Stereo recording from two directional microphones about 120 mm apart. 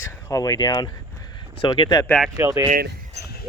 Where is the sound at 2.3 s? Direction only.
25° right (ahead or behind).